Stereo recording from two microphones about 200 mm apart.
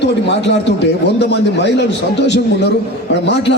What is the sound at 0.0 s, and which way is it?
A man's voice, 60° left (ahead or behind).